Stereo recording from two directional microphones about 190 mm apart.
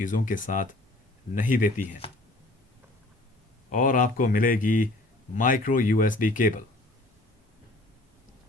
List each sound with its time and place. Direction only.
0.0 s speech: 45° left (ahead or behind)
3.7 s speech: 45° left (ahead or behind)